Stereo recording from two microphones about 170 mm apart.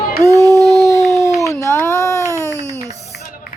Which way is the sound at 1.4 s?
20° left (ahead or behind).